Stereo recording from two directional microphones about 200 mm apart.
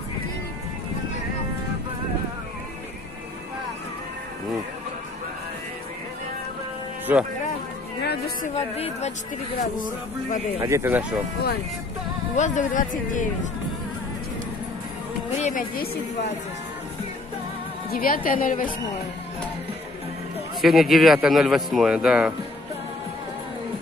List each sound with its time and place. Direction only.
7.1 s speech: 10° right (ahead or behind)
8.0 s music: 55° left (ahead or behind)
8.5 s speech: 30° left (ahead or behind)
10.6 s speech: 15° right (ahead or behind)
12.4 s speech: 40° left (ahead or behind)
15.3 s a woman's voice: 40° left (ahead or behind)
17.9 s a woman's voice: 45° left (ahead or behind)
20.6 s a man's voice: centre (ahead or behind)